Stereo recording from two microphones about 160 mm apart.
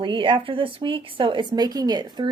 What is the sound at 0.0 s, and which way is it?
Speech, 30° right (ahead or behind).